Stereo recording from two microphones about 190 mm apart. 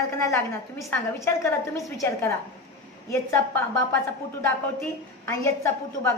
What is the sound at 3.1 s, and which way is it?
A woman's voice, 15° left (ahead or behind).